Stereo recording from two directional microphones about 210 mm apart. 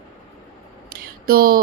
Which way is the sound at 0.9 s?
45° right (ahead or behind).